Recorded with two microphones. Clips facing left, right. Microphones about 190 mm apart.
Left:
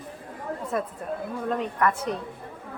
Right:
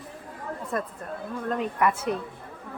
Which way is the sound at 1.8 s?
10° right (ahead or behind).